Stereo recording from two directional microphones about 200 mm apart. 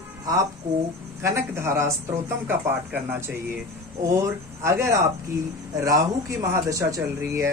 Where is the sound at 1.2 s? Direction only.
15° right (ahead or behind).